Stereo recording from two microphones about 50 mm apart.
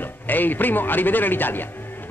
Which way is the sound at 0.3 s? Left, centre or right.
Left.